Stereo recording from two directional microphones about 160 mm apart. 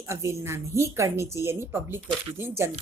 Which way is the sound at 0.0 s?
15° right (ahead or behind).